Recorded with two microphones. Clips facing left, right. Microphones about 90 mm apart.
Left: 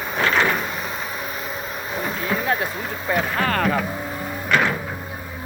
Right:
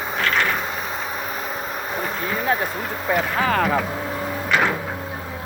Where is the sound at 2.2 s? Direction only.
Centre (ahead or behind).